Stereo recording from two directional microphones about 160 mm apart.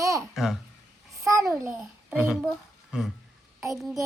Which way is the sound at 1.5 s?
5° right (ahead or behind).